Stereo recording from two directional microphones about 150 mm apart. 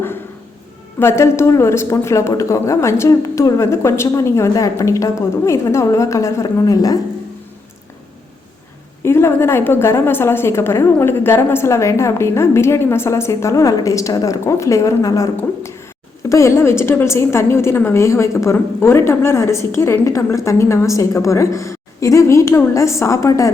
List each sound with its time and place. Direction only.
0.9 s a woman's voice: 15° left (ahead or behind)
9.0 s a woman's voice: 15° left (ahead or behind)